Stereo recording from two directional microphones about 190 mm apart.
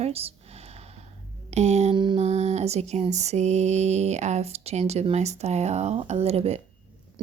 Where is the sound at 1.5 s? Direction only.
35° right (ahead or behind).